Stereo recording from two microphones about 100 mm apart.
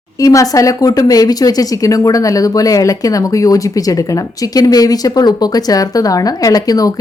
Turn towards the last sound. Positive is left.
turn(degrees=35)  # may be behind; listen again after turning